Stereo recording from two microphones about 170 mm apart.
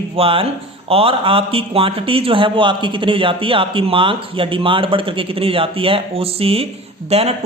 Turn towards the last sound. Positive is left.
turn(degrees=-35)  # may be behind; listen again after turning